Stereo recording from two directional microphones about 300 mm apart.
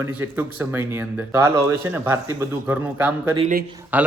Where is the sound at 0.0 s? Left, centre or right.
Centre.